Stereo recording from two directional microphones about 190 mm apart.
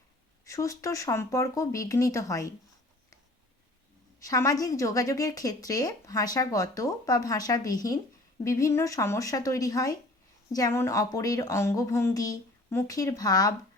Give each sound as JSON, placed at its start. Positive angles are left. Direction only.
{"t": 0.4, "sound": "a woman's voice", "side_deg": 15}
{"t": 4.2, "sound": "a woman's voice", "side_deg": 15}